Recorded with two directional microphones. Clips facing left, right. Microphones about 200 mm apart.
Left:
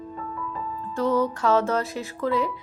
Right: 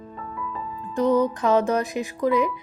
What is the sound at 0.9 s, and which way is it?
Speech, 15° right (ahead or behind).